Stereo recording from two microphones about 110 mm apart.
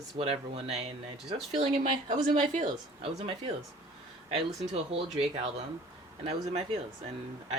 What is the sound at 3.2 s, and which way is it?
Speech, 60° right (ahead or behind).